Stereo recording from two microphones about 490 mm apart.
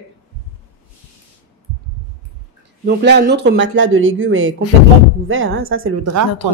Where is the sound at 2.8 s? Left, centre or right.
Centre.